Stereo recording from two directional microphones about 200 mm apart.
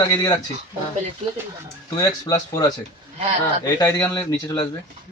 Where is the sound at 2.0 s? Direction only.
20° left (ahead or behind).